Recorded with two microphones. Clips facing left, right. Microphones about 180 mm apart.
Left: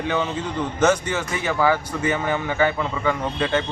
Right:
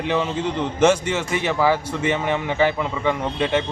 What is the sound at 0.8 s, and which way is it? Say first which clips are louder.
A man's voice: right 2 dB; 30° right (ahead or behind).